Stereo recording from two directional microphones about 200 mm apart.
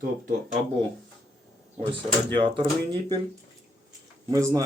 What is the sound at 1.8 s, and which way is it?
Speech, 25° right (ahead or behind).